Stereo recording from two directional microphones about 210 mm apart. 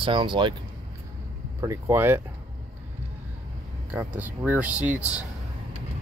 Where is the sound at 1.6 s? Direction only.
10° right (ahead or behind).